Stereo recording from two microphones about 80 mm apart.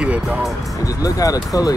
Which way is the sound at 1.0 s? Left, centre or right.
Left.